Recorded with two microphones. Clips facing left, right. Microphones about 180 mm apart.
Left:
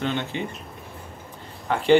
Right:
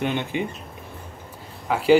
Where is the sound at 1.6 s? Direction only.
5° right (ahead or behind).